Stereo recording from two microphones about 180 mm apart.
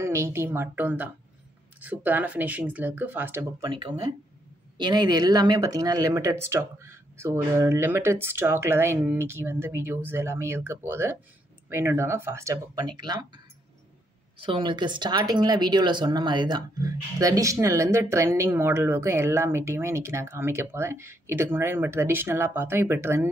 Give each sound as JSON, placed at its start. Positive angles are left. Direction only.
{"t": 0.0, "sound": "speech", "side_deg": -15}
{"t": 3.6, "sound": "speech", "side_deg": -25}
{"t": 14.4, "sound": "speech", "side_deg": -30}